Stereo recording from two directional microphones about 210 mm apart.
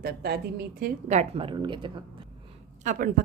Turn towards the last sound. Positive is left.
turn(degrees=-40)  # may be behind; listen again after turning